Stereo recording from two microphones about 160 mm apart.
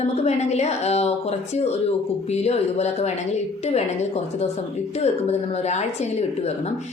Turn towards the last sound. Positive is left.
turn(degrees=40)  # may be behind; listen again after turning